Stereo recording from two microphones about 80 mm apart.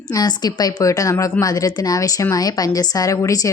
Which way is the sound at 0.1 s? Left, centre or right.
Left.